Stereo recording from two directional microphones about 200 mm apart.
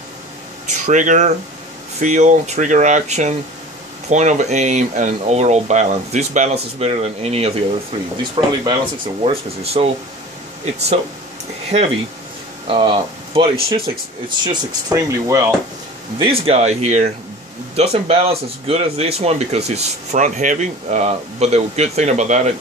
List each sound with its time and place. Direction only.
0.7 s speech: 40° right (ahead or behind); by 15.4 s 15° right (ahead or behind)
16.2 s speech: 30° right (ahead or behind)